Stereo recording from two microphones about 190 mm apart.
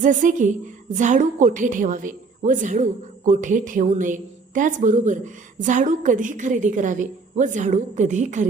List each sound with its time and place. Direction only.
0.0 s a woman's voice: 45° right (ahead or behind)